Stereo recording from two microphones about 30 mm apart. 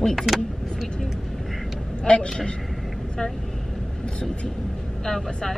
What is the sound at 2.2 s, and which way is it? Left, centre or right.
Speech, left.